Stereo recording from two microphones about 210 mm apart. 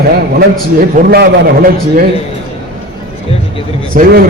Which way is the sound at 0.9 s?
45° right (ahead or behind).